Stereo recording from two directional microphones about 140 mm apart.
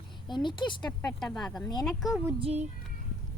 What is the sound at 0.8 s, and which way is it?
Speech, 15° left (ahead or behind).